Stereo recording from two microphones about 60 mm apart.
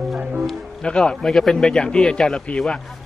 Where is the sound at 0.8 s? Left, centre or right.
Centre.